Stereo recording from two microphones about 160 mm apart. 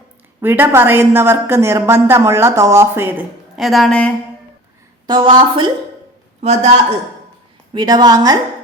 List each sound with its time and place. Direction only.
0.4 s a woman's voice: 15° right (ahead or behind); by 4.1 s 5° left (ahead or behind)
5.0 s a woman's voice: 25° right (ahead or behind)
6.4 s a man's voice: 45° right (ahead or behind)
7.7 s a woman's voice: 25° right (ahead or behind)